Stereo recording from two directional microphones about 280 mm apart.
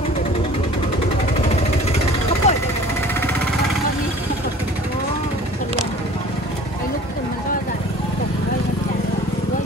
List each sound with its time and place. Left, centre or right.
2.4 s vehicle: left